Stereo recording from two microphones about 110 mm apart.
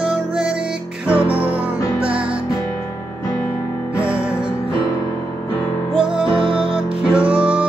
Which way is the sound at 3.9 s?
10° right (ahead or behind).